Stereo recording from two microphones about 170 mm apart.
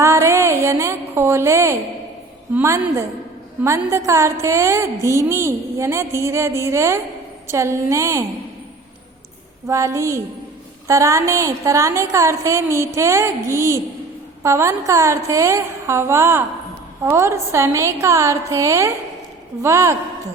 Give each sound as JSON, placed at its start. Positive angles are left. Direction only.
{"t": 0.0, "sound": "a sound", "side_deg": -15}
{"t": 2.6, "sound": "mantra", "side_deg": -15}
{"t": 9.6, "sound": "mantra", "side_deg": -20}